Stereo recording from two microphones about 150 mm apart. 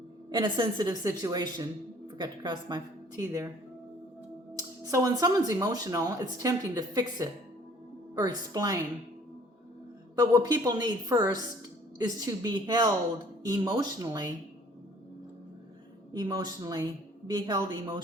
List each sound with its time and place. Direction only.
0.3 s speech: 30° right (ahead or behind)
4.5 s speech: 20° right (ahead or behind)
10.2 s speech: 25° right (ahead or behind)
16.1 s speech: 25° right (ahead or behind)